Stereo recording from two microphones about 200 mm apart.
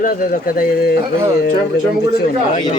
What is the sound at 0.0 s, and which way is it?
Speech, 45° left (ahead or behind).